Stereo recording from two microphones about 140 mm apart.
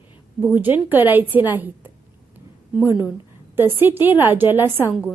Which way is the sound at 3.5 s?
15° right (ahead or behind).